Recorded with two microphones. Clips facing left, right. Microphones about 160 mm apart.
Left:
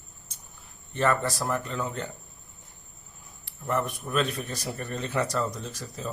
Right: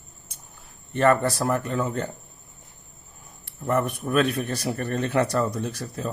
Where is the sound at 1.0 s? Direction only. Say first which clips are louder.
Right 6 dB; 60° right (ahead or behind).